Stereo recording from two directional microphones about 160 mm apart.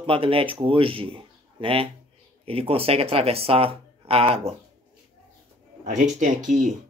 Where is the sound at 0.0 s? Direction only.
35° right (ahead or behind).